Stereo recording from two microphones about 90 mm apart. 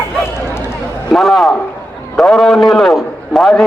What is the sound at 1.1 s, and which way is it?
A man's voice, centre (ahead or behind).